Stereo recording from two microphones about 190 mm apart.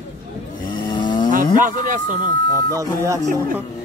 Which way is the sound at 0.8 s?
25° left (ahead or behind).